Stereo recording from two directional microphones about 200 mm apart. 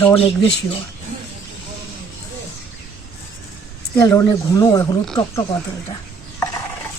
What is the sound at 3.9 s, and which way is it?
Speech, 15° left (ahead or behind).